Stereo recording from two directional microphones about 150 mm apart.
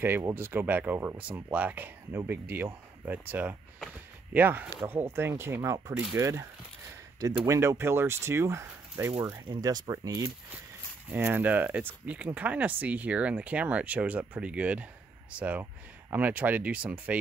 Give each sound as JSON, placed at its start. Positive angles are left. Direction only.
{"t": 0.0, "sound": "speech", "side_deg": -15}
{"t": 7.4, "sound": "speech", "side_deg": -20}